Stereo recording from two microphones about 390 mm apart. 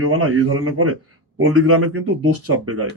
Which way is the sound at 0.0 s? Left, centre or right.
Right.